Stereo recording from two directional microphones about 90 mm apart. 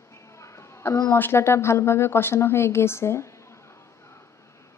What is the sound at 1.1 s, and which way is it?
A woman's voice, 25° left (ahead or behind).